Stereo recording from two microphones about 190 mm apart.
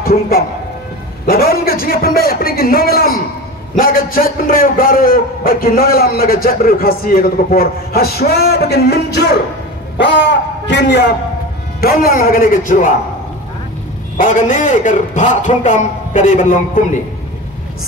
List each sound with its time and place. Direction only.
0.0 s a man's voice: 50° left (ahead or behind)
10.7 s a man's voice: 65° left (ahead or behind)
11.8 s a man's voice: 50° left (ahead or behind)
14.1 s a man's voice: 45° left (ahead or behind)